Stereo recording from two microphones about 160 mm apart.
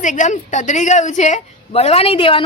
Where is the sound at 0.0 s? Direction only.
50° left (ahead or behind).